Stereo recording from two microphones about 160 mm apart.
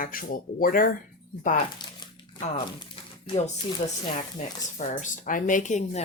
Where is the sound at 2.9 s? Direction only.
40° left (ahead or behind).